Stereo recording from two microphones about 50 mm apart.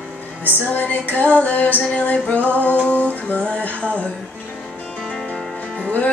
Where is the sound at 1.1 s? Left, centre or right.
Left.